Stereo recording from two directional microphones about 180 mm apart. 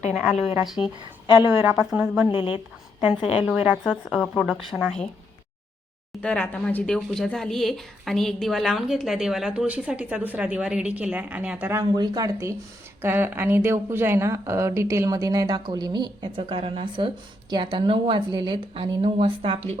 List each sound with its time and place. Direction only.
0.1 s a woman's voice: 5° right (ahead or behind)
1.5 s a woman's voice: 15° right (ahead or behind)
2.3 s a woman's voice: 30° left (ahead or behind)
3.4 s a woman's voice: 5° right (ahead or behind)
6.2 s a woman's voice: 10° left (ahead or behind); by 11.8 s 5° right (ahead or behind)
11.8 s a woman's voice: 20° right (ahead or behind)